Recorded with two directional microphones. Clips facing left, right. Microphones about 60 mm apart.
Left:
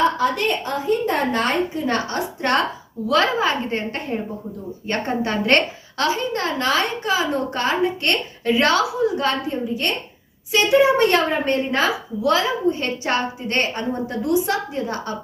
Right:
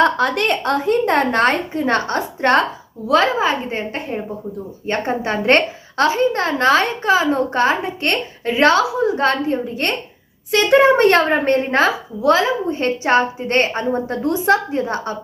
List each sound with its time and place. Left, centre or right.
0.0 s a woman's voice: right
3.1 s a woman's voice: right
9.1 s a woman's voice: right